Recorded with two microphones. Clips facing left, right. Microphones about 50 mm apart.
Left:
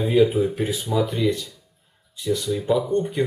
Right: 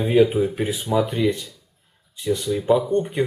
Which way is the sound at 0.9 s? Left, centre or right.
Right.